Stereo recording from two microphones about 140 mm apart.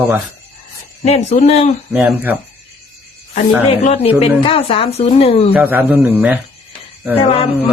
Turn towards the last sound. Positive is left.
turn(degrees=45)  # may be behind; listen again after turning